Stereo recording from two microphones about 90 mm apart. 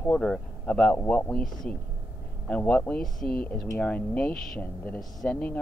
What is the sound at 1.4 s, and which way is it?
Speech, 5° left (ahead or behind).